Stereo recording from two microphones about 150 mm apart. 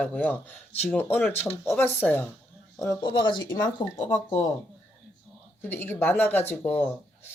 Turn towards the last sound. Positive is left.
turn(degrees=10)  # may be behind; listen again after turning